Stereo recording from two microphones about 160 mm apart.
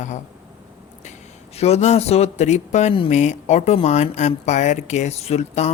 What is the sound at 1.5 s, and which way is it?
Speech, 40° left (ahead or behind).